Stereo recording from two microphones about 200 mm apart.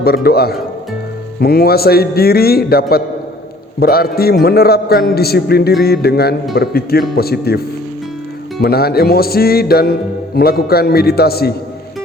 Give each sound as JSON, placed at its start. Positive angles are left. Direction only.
{"t": 0.0, "sound": "music", "side_deg": 50}
{"t": 8.6, "sound": "music", "side_deg": 50}